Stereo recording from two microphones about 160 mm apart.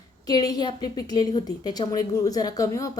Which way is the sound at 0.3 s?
25° left (ahead or behind).